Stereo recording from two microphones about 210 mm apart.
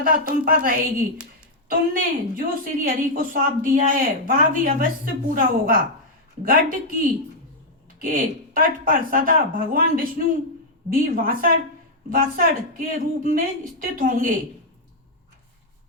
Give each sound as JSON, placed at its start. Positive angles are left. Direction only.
{"t": 0.0, "sound": "a woman's voice", "side_deg": -40}
{"t": 7.9, "sound": "a woman's voice", "side_deg": -40}